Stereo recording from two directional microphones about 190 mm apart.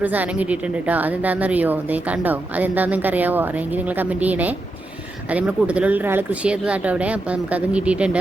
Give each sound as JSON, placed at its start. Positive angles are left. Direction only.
{"t": 0.0, "sound": "a woman's voice", "side_deg": -10}